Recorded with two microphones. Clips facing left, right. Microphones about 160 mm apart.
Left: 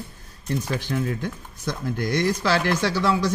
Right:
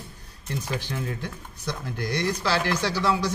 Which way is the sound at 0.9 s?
50° left (ahead or behind).